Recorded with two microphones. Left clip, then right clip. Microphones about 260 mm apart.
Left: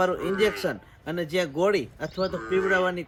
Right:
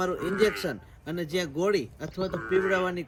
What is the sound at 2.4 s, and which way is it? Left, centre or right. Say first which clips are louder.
Speech: right 1 dB; left.